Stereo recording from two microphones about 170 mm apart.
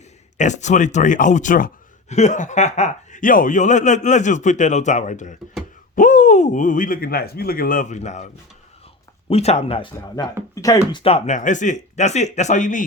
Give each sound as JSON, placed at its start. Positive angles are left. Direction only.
{"t": 0.3, "sound": "speech", "side_deg": 45}
{"t": 9.3, "sound": "speech", "side_deg": 40}
{"t": 10.5, "sound": "speech", "side_deg": 20}
{"t": 11.0, "sound": "speech", "side_deg": 40}